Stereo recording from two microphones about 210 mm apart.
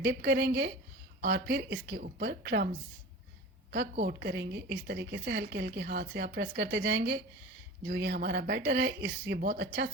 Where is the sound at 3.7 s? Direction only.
45° right (ahead or behind).